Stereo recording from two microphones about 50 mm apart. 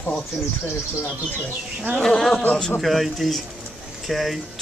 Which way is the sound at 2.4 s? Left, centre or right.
Left.